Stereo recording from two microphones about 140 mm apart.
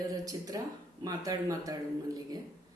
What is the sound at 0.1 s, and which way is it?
Speech, 25° right (ahead or behind).